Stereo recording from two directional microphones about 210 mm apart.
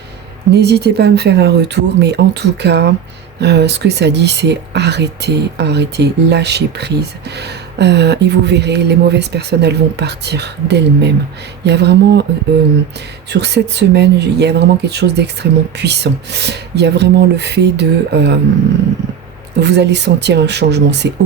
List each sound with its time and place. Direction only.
0.5 s speech: 50° right (ahead or behind)
13.3 s speech: 55° right (ahead or behind)
19.5 s speech: 55° right (ahead or behind)